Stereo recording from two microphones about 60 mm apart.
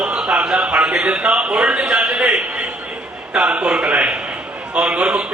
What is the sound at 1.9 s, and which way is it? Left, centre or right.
A man's voice, centre.